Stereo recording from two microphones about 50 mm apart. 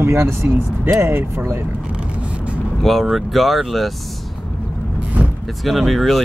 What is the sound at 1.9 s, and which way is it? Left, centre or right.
Vehicle, right.